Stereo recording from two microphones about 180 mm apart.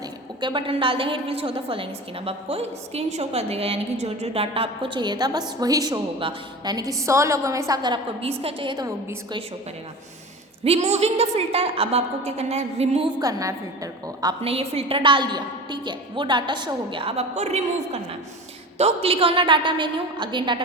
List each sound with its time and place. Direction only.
0.4 s a woman's voice: 30° right (ahead or behind)
10.6 s a woman's voice: 35° right (ahead or behind)
13.1 s a woman's voice: 20° right (ahead or behind)